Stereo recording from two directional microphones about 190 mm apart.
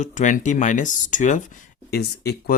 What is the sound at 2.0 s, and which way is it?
Speech, 60° left (ahead or behind).